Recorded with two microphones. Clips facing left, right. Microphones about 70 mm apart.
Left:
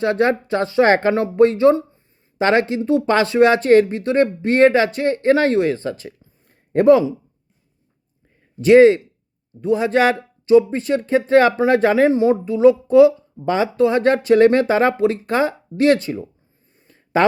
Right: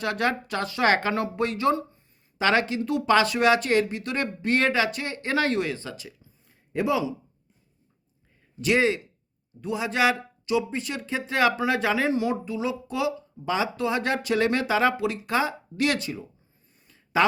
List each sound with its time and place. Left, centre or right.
0.0 s speech: left
8.6 s speech: left
16.8 s a sound: left